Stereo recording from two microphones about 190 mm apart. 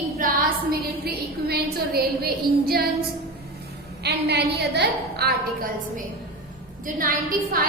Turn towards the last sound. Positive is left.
turn(degrees=-45)  # may be behind; listen again after turning